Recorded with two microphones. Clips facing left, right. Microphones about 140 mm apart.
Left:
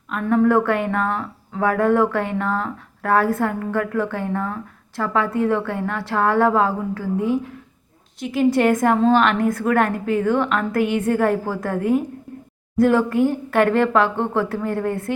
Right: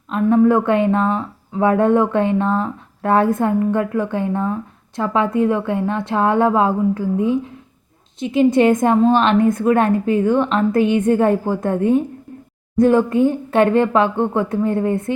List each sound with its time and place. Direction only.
0.1 s speech: 20° right (ahead or behind)